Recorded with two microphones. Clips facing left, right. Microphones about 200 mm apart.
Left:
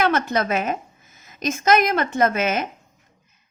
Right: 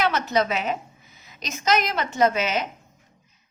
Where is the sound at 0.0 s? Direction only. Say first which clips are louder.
Left 2 dB; 50° left (ahead or behind).